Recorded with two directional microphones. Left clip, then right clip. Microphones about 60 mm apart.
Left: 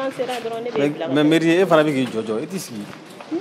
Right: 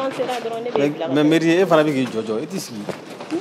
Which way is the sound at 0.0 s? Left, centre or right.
Centre.